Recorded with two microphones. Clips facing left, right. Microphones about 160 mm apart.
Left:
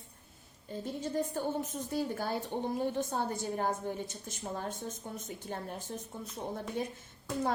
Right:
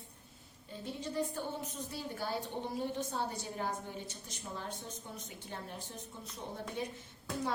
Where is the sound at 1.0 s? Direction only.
45° left (ahead or behind).